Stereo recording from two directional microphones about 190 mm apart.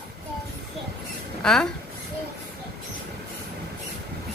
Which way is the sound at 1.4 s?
5° left (ahead or behind).